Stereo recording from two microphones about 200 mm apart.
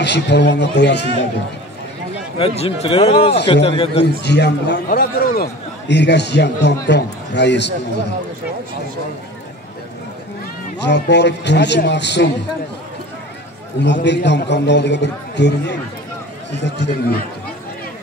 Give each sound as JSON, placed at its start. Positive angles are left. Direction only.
{"t": 0.0, "sound": "a man's voice", "side_deg": 60}
{"t": 2.3, "sound": "a man's voice", "side_deg": 30}
{"t": 4.2, "sound": "a man's voice", "side_deg": 60}
{"t": 10.8, "sound": "a man's voice", "side_deg": 60}
{"t": 13.7, "sound": "a man's voice", "side_deg": 60}